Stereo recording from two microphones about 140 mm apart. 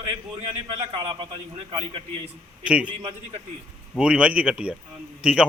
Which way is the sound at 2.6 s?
10° right (ahead or behind).